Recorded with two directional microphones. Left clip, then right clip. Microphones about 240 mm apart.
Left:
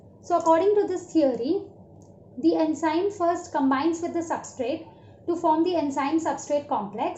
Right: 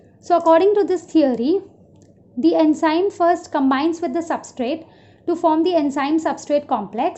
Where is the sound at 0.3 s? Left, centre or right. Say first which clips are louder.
Right 6 dB; right.